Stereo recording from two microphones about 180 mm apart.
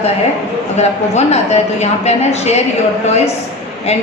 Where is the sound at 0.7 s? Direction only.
35° left (ahead or behind).